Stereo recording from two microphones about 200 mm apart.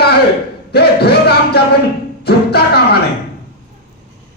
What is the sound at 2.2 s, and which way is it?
Speech, 55° left (ahead or behind).